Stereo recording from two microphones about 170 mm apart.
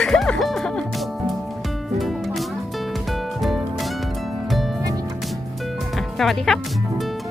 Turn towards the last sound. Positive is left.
turn(degrees=0)  # may be behind; listen again after turning